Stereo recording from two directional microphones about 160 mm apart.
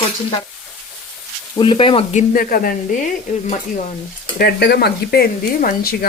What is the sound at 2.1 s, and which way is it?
Speech, 60° left (ahead or behind).